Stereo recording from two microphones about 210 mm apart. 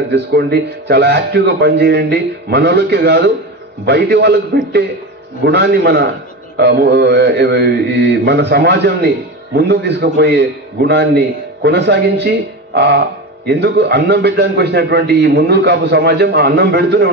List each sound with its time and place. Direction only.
0.1 s a man's voice: 50° right (ahead or behind)
5.4 s a man's voice: 50° right (ahead or behind)